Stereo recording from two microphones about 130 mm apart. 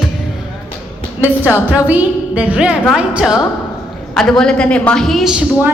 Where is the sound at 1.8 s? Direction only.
10° right (ahead or behind).